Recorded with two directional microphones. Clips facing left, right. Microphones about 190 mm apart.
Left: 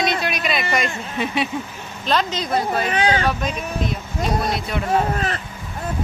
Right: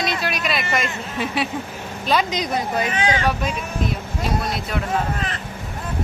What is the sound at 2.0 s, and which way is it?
Speech, 10° right (ahead or behind).